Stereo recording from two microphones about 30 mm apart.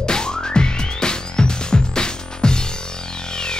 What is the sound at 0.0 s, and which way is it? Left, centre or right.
Music, left.